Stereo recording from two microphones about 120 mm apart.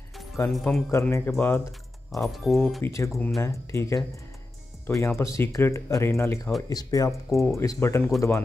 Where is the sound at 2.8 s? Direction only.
25° left (ahead or behind).